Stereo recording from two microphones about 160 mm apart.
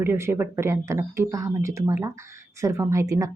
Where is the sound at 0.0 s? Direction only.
15° right (ahead or behind).